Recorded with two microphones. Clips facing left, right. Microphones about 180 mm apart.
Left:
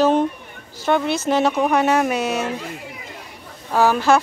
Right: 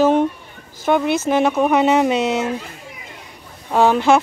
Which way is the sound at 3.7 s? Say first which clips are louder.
Right 2 dB; 20° right (ahead or behind).